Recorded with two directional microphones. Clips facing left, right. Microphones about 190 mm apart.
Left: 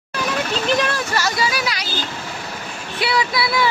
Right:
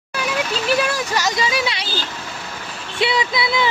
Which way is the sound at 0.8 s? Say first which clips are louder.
Right 1 dB; 10° right (ahead or behind).